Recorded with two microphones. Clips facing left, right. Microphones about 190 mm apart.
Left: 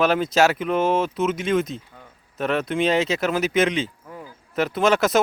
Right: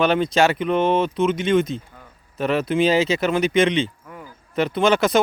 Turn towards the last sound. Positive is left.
turn(degrees=0)  # may be behind; listen again after turning